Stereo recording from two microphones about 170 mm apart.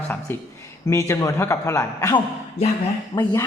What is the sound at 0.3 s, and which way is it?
A man's voice, 10° left (ahead or behind).